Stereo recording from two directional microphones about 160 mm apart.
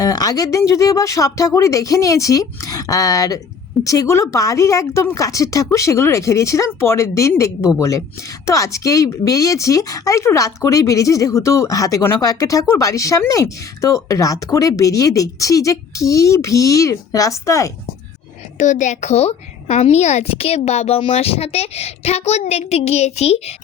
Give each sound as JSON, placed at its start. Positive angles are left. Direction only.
{"t": 0.0, "sound": "speech", "side_deg": 25}
{"t": 18.5, "sound": "a child's voice", "side_deg": 50}